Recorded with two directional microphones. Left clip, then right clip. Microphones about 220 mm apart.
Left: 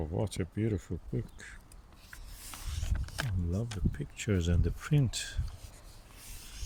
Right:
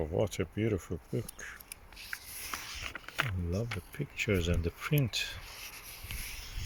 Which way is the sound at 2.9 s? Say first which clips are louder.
Right 4 dB; 35° left (ahead or behind).